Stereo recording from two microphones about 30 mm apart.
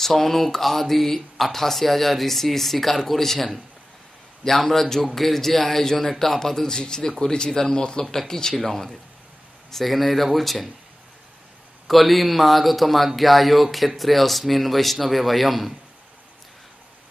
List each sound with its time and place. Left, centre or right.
0.0 s speech: centre
4.5 s speech: centre
6.8 s speech: left; by 10.7 s centre
11.9 s speech: centre